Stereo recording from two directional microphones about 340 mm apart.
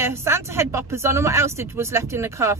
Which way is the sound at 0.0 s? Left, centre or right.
Centre.